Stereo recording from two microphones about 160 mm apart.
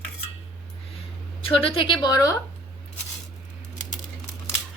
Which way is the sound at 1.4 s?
35° left (ahead or behind).